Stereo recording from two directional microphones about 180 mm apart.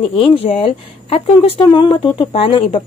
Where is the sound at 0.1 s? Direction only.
30° left (ahead or behind).